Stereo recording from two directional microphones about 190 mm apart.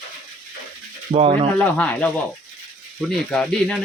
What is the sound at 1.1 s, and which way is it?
Speech, 30° right (ahead or behind).